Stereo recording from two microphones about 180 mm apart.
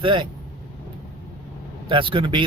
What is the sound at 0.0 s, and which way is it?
Speech, 25° right (ahead or behind).